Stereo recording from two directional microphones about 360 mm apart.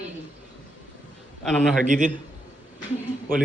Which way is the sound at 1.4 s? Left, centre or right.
Centre.